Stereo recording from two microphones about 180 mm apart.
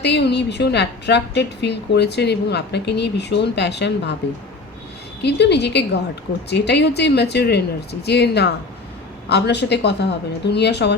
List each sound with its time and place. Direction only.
0.0 s a woman's voice: 70° left (ahead or behind)
5.2 s a woman's voice: 70° left (ahead or behind)